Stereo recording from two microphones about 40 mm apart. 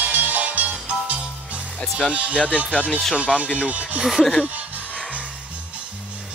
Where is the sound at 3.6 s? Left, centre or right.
Right.